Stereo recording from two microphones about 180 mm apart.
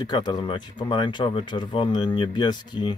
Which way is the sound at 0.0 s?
25° left (ahead or behind).